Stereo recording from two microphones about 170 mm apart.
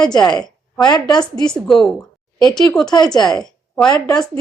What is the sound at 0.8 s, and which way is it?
Speech, 25° left (ahead or behind).